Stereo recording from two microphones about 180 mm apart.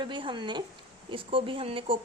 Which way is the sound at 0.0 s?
25° right (ahead or behind).